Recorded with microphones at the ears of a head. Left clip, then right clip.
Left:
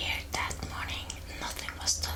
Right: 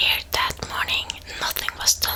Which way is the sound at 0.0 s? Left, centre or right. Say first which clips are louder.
Right 12 dB; right.